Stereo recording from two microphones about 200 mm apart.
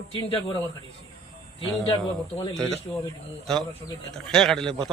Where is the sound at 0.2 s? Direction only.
25° left (ahead or behind).